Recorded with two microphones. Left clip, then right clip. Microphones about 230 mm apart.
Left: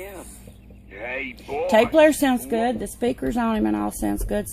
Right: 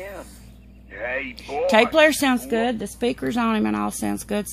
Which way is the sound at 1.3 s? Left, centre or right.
Right.